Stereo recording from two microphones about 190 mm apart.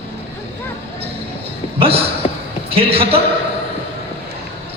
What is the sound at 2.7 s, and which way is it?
Speech, 30° right (ahead or behind).